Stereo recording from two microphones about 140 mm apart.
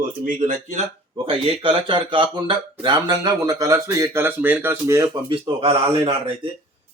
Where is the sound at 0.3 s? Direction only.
70° right (ahead or behind).